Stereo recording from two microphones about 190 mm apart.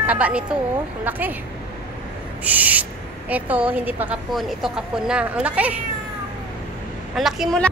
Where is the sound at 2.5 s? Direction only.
10° right (ahead or behind).